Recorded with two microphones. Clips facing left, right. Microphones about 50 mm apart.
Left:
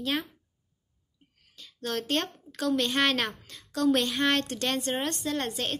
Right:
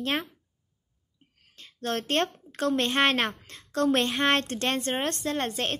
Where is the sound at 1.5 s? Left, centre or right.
Right.